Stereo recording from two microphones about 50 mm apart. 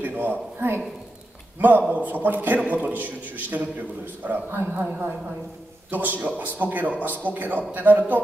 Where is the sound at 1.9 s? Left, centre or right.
Right.